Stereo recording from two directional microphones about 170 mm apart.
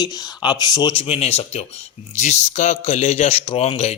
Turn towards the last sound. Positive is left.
turn(degrees=40)  # may be behind; listen again after turning